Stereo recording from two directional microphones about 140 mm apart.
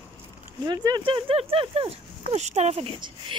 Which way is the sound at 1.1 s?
40° right (ahead or behind).